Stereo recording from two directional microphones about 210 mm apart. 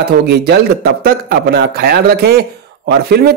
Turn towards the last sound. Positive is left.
turn(degrees=-50)  # may be behind; listen again after turning